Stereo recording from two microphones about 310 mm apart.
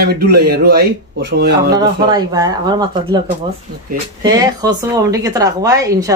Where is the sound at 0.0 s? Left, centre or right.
Right.